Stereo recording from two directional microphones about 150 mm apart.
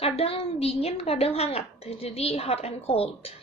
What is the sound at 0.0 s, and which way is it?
A woman's voice, 40° left (ahead or behind).